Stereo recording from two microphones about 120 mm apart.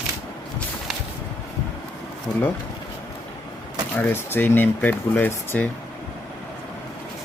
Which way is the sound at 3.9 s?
15° left (ahead or behind).